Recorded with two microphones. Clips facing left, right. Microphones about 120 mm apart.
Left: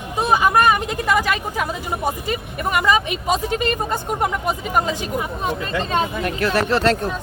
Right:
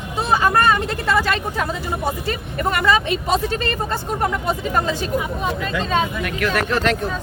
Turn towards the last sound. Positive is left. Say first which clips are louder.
# left 2 dB
turn(degrees=30)  # may be behind; listen again after turning